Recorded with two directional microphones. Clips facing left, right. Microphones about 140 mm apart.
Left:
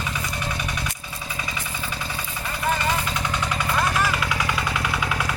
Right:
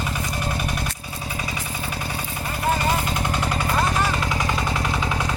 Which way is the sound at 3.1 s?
50° right (ahead or behind).